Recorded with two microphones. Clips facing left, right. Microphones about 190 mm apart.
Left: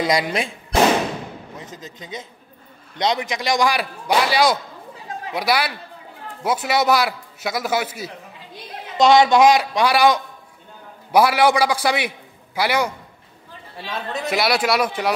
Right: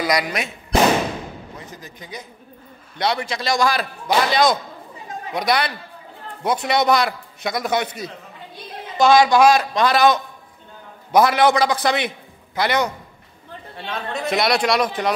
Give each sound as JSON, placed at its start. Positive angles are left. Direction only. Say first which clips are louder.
{"t": 0.0, "sound": "speech", "louder": "left 1 dB", "side_deg": 25}
{"t": 1.6, "sound": "a man's voice", "louder": "left 1 dB", "side_deg": 20}
{"t": 8.9, "sound": "a man's voice", "louder": "even", "side_deg": 20}